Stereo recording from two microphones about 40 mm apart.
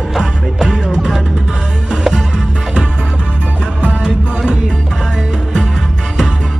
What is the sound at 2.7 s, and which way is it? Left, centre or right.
Music, right.